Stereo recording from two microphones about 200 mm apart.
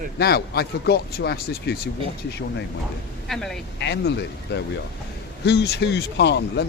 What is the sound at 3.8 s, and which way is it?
Speech, 60° left (ahead or behind).